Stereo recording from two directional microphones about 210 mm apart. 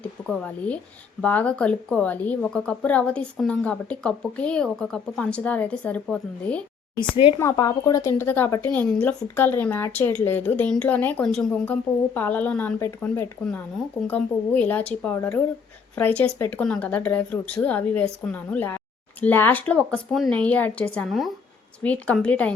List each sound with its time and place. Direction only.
0.0 s a woman's voice: 5° left (ahead or behind)
7.3 s a woman's voice: 15° left (ahead or behind)